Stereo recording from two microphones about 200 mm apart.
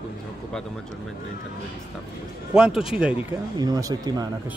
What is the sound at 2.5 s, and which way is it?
Speech, 5° right (ahead or behind).